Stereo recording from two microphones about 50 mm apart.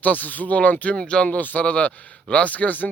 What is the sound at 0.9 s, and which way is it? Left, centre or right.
Speech, centre.